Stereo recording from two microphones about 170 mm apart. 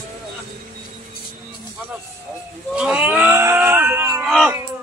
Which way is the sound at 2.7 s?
5° right (ahead or behind).